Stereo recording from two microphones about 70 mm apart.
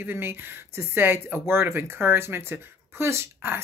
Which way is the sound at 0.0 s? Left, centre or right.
Right.